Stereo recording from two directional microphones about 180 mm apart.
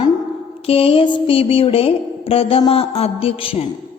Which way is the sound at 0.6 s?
30° left (ahead or behind).